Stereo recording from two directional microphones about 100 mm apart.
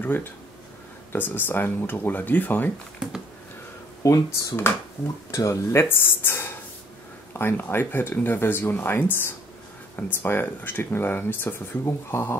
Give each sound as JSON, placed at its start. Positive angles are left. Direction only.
{"t": 0.0, "sound": "speech", "side_deg": 20}
{"t": 4.0, "sound": "speech", "side_deg": 35}